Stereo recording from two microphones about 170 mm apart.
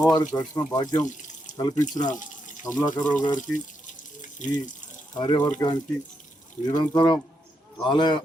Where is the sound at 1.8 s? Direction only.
45° left (ahead or behind).